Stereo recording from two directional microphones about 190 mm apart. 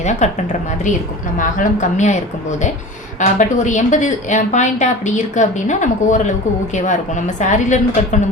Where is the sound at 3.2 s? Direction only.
40° left (ahead or behind).